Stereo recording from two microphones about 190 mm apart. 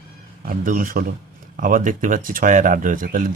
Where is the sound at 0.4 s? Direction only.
45° right (ahead or behind).